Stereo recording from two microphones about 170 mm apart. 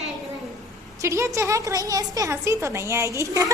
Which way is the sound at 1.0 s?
15° right (ahead or behind).